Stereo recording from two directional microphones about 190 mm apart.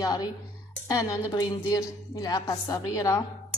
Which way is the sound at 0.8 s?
15° left (ahead or behind).